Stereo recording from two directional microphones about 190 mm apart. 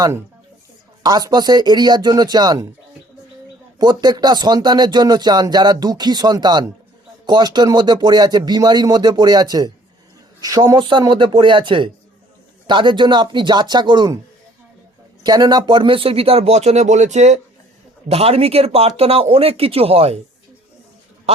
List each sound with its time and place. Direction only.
1.0 s speech: 20° right (ahead or behind)
3.8 s speech: 20° right (ahead or behind)
15.2 s speech: 20° right (ahead or behind)
21.3 s speech: 35° right (ahead or behind)